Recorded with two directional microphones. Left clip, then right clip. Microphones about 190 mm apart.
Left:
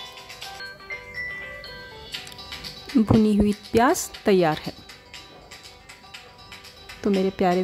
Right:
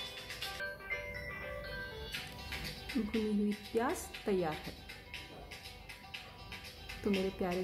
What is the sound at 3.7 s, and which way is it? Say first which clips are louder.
Speech: left 16 dB; 45° left (ahead or behind).